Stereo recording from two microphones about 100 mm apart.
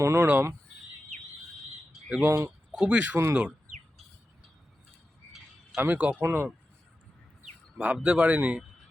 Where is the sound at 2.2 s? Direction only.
25° right (ahead or behind).